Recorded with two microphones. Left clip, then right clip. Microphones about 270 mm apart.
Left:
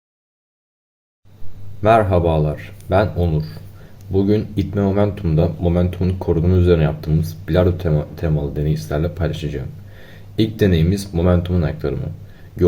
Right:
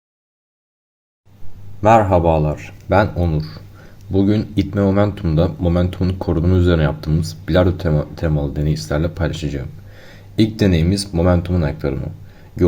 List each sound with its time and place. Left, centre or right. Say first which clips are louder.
1.8 s speech: right 2 dB; centre